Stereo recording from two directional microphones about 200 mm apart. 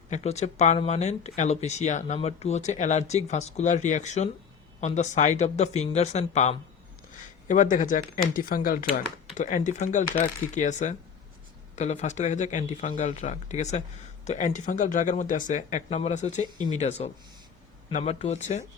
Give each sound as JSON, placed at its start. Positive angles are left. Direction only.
{"t": 0.1, "sound": "speech", "side_deg": 35}